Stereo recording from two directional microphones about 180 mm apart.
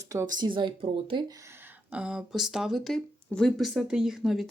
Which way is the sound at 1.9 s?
5° right (ahead or behind).